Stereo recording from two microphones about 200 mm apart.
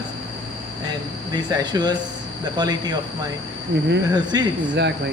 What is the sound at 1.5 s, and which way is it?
Speech, 20° right (ahead or behind).